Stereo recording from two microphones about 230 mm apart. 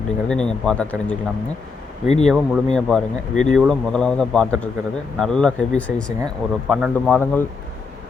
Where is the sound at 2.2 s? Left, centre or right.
Centre.